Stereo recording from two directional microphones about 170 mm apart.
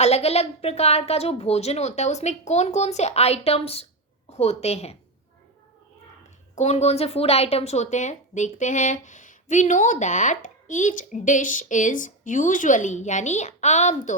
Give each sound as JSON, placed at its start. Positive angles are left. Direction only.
{"t": 0.0, "sound": "a woman's voice", "side_deg": 35}
{"t": 6.6, "sound": "speech", "side_deg": 40}